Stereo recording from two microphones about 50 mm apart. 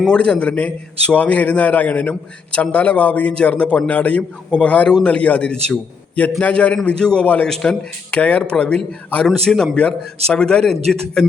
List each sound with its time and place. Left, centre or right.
0.1 s a man's voice: left
7.4 s a man's voice: centre
8.1 s a man's voice: left
9.2 s a man's voice: centre
9.7 s a man's voice: left